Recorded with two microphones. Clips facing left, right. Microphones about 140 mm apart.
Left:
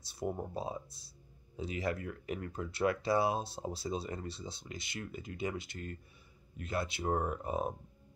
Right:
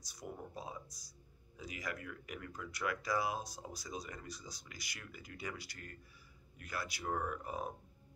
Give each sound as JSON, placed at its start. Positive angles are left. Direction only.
{"t": 0.0, "sound": "speech", "side_deg": 30}